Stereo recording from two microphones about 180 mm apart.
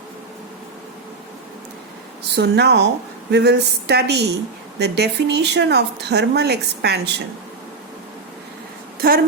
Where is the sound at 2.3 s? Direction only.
70° right (ahead or behind).